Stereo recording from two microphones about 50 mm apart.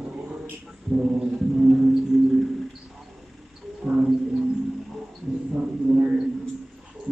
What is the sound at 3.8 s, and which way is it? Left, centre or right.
Music, right.